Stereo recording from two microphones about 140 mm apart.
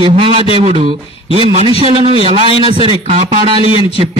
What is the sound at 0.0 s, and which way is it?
A man's voice, 40° right (ahead or behind).